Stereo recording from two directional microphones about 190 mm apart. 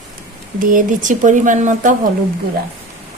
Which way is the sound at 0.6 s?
45° right (ahead or behind).